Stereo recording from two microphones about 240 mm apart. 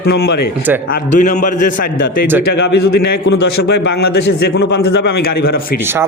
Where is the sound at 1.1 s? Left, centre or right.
Left.